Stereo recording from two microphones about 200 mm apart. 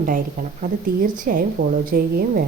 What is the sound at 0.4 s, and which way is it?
A woman's voice, 45° right (ahead or behind).